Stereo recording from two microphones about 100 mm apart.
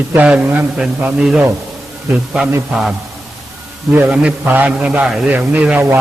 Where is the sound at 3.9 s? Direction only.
15° right (ahead or behind).